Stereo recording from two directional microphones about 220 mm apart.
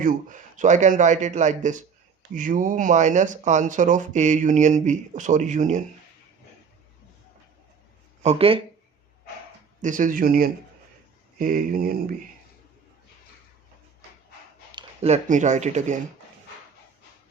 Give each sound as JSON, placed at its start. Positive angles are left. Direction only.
{"t": 0.0, "sound": "speech", "side_deg": -35}
{"t": 8.2, "sound": "speech", "side_deg": -30}
{"t": 9.8, "sound": "speech", "side_deg": -35}
{"t": 14.7, "sound": "speech", "side_deg": -25}